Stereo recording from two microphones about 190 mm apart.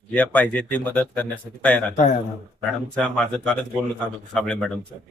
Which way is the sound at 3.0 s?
5° left (ahead or behind).